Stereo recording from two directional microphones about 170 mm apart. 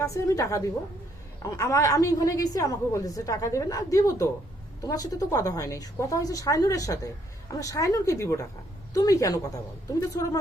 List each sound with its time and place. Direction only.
0.0 s a woman's voice: 20° left (ahead or behind)